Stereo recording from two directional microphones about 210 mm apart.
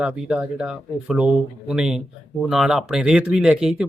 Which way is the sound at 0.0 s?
5° right (ahead or behind).